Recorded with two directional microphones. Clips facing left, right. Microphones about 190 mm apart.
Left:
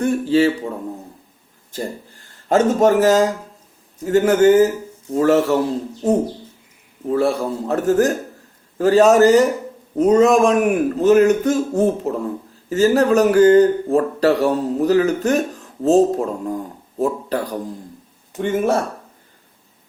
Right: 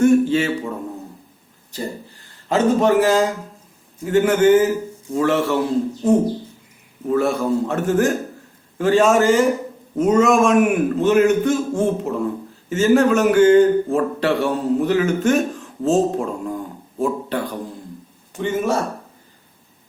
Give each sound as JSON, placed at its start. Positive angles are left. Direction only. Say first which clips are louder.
{"t": 0.0, "sound": "a sound", "louder": "right 1 dB", "side_deg": 35}
{"t": 1.7, "sound": "speech", "louder": "left 1 dB", "side_deg": 50}
{"t": 18.3, "sound": "speech", "louder": "left 2 dB", "side_deg": 55}